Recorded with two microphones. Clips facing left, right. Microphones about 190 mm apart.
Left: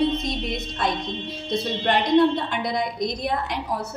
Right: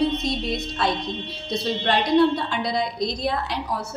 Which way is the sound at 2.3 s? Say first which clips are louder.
Right 1 dB; 20° left (ahead or behind).